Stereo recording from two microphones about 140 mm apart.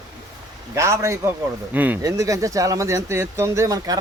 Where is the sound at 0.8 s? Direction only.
20° right (ahead or behind).